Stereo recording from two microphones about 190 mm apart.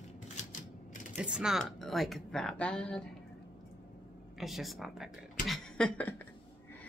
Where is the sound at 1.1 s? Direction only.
5° right (ahead or behind).